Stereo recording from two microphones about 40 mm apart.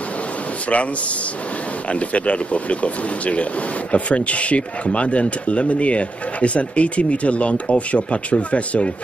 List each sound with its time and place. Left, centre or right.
0.7 s speech: left